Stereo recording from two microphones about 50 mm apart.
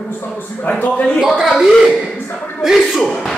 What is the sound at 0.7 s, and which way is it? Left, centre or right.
Speech, left.